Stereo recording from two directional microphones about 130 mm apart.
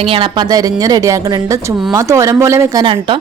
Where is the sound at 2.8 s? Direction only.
40° right (ahead or behind).